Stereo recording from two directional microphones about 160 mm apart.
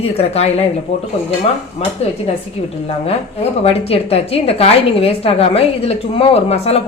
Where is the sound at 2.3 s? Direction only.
40° left (ahead or behind).